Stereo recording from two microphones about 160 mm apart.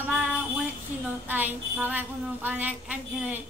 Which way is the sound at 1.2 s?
10° right (ahead or behind).